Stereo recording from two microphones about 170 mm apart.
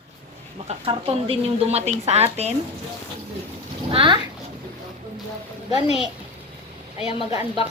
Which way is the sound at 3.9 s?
30° right (ahead or behind).